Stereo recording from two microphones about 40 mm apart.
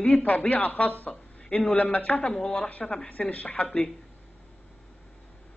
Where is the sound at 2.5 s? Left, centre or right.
Left.